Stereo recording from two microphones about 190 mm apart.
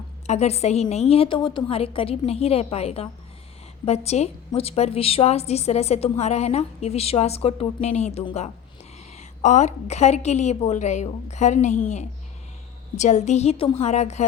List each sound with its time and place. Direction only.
0.3 s a woman's voice: 35° left (ahead or behind)
13.0 s a woman's voice: 40° left (ahead or behind)